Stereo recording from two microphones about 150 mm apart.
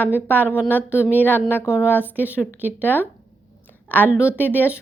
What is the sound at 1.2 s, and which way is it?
A woman's voice, 15° left (ahead or behind).